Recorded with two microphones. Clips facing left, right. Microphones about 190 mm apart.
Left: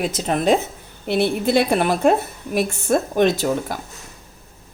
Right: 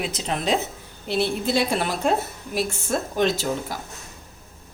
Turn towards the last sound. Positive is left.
turn(degrees=55)  # may be behind; listen again after turning